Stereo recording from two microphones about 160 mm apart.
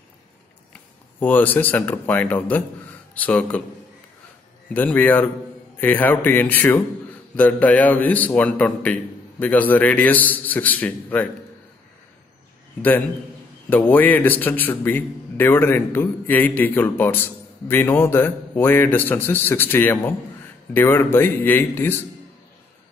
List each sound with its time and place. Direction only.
0.7 s a man's voice: 10° left (ahead or behind)
4.7 s a man's voice: 10° left (ahead or behind)
13.7 s a man's voice: 10° left (ahead or behind)